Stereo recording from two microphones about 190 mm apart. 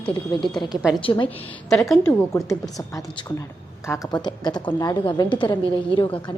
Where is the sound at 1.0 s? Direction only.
25° left (ahead or behind).